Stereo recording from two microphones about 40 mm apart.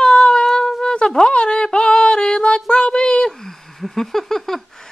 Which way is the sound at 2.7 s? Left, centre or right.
Left.